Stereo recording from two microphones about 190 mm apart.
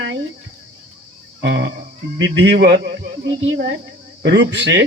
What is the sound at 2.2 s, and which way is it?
Speech, 70° right (ahead or behind).